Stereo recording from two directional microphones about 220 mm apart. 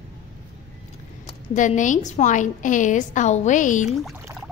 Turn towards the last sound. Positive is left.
turn(degrees=35)  # may be behind; listen again after turning